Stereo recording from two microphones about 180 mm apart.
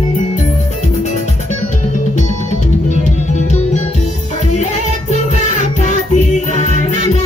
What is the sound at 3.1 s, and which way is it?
Music, 40° left (ahead or behind).